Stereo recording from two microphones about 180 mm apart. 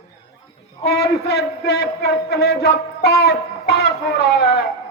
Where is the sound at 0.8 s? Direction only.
65° left (ahead or behind).